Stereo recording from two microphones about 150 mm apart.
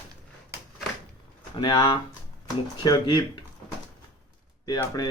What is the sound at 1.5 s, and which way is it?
Speech, 30° left (ahead or behind).